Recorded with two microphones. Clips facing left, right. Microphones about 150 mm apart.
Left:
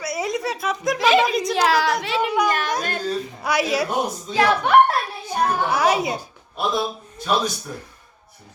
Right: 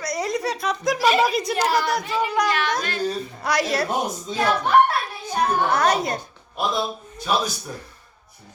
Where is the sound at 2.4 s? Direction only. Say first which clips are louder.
Left 1 dB; 45° left (ahead or behind).